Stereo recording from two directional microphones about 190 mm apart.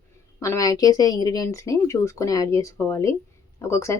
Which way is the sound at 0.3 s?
15° left (ahead or behind).